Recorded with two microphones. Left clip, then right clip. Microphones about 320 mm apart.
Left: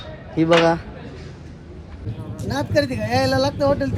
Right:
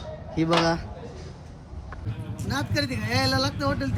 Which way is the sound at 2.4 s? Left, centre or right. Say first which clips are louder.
Left 8 dB; centre.